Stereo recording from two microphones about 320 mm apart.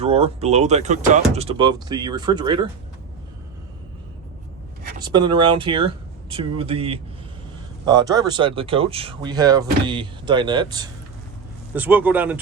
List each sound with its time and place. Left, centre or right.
0.0 s speech: centre
5.0 s a man's voice: centre